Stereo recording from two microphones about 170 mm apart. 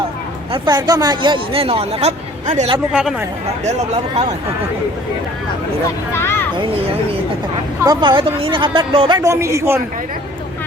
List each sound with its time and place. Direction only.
0.5 s speech: 25° right (ahead or behind)
2.9 s speech: 5° right (ahead or behind)
3.6 s speech: 40° right (ahead or behind)
6.1 s speech: 15° left (ahead or behind)
7.9 s speech: 30° right (ahead or behind)